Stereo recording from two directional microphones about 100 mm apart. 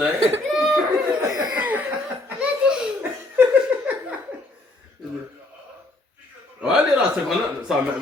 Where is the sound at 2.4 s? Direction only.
10° right (ahead or behind).